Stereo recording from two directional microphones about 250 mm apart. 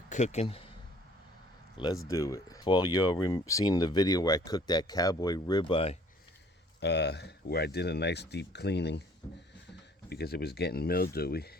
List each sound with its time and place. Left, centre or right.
0.1 s speech: left
2.0 s speech: centre
6.7 s speech: left
10.1 s speech: left